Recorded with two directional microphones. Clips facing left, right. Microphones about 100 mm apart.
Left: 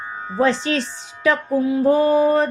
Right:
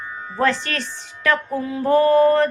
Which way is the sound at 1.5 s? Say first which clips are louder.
Left 2 dB; 5° left (ahead or behind).